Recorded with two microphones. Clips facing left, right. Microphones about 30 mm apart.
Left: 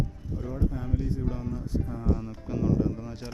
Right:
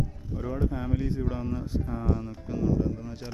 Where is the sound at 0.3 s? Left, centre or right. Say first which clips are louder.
Right 2 dB; right.